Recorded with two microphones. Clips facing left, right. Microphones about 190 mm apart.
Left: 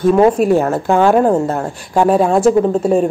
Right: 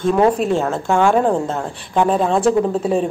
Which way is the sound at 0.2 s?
10° left (ahead or behind).